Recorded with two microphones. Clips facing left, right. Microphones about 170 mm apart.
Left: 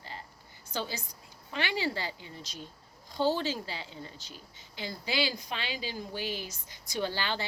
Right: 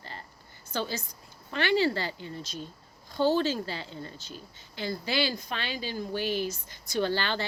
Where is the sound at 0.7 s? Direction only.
15° left (ahead or behind).